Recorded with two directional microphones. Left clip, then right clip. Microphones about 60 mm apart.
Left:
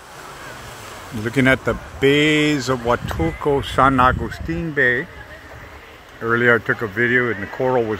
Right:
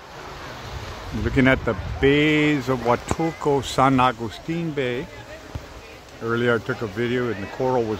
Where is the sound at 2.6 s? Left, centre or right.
Centre.